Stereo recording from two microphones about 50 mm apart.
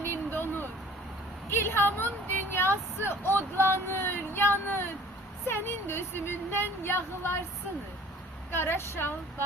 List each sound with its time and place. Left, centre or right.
0.0 s vehicle: left
1.5 s speech: left
8.5 s speech: left